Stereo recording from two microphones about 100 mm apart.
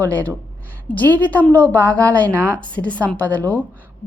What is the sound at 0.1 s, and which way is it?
A woman's voice, 15° left (ahead or behind).